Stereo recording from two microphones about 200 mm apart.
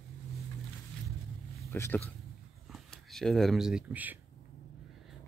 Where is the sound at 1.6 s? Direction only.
10° left (ahead or behind).